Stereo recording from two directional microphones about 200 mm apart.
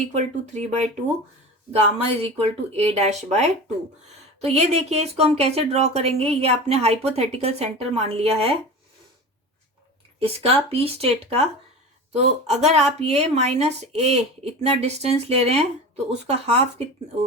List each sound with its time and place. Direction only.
0.1 s speech: 35° right (ahead or behind)
2.0 s speech: 30° right (ahead or behind)
10.2 s speech: 30° right (ahead or behind)